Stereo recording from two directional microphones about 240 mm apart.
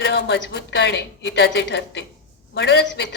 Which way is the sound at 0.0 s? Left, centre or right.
Left.